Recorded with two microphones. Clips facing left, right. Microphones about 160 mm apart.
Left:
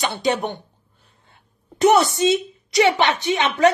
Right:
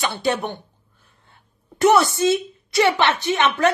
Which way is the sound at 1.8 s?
20° left (ahead or behind).